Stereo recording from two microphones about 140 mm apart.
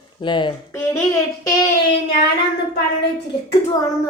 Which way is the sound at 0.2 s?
35° left (ahead or behind).